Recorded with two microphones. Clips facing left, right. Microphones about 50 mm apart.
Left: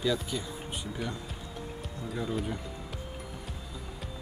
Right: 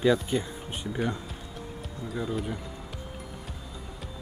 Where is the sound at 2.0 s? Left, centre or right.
Centre.